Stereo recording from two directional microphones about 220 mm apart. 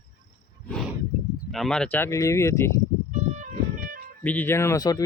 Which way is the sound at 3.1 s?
35° right (ahead or behind).